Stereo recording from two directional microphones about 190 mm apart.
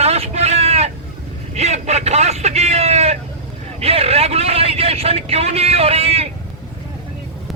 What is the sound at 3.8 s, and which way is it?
Speech, 30° right (ahead or behind).